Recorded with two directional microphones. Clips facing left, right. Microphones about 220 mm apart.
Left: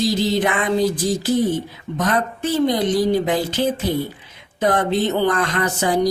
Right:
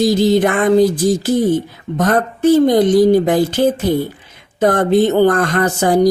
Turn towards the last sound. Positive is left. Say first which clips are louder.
# right 6 dB
turn(degrees=-45)  # may be behind; listen again after turning